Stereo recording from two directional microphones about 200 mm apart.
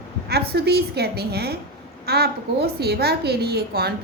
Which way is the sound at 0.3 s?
55° right (ahead or behind).